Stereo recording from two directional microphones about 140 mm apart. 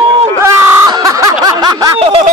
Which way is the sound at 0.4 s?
25° right (ahead or behind).